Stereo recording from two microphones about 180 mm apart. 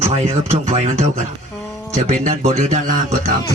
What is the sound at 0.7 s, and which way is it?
Speech, 40° right (ahead or behind).